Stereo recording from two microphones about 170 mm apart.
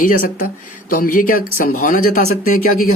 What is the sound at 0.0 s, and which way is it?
A man's voice, 50° left (ahead or behind).